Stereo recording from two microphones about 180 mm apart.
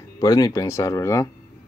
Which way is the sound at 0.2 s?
20° left (ahead or behind).